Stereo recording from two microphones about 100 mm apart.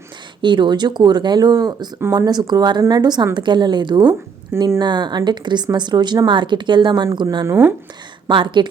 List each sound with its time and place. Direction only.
0.4 s speech: 50° right (ahead or behind)
7.4 s speech: 25° right (ahead or behind)
8.3 s a woman's voice: 55° right (ahead or behind)